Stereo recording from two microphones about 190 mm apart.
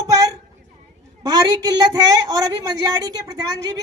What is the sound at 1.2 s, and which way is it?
A woman's voice, 20° right (ahead or behind).